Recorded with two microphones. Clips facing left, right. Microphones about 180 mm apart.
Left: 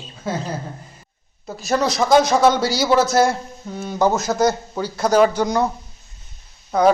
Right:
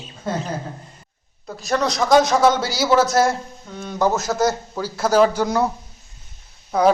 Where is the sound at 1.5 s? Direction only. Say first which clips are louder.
Left 1 dB; 5° left (ahead or behind).